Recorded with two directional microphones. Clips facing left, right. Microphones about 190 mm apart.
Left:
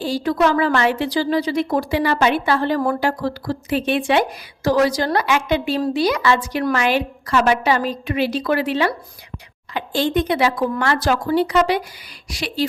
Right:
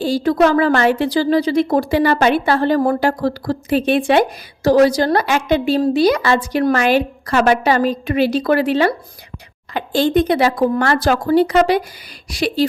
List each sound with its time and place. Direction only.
0.0 s a woman's voice: 35° right (ahead or behind)